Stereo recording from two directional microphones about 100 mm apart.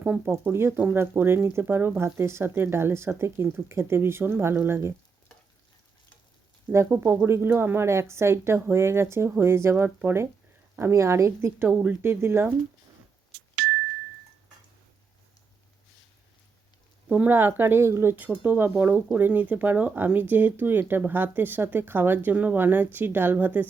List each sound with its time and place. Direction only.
0.0 s speech: 15° right (ahead or behind)
6.7 s speech: 25° right (ahead or behind)
17.1 s speech: 15° right (ahead or behind)